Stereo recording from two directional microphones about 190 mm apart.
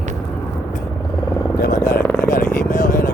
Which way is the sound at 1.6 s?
60° left (ahead or behind).